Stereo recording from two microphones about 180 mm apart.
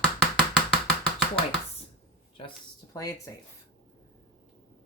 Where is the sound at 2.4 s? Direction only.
30° left (ahead or behind).